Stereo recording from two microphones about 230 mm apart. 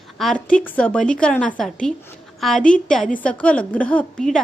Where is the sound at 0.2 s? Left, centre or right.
Centre.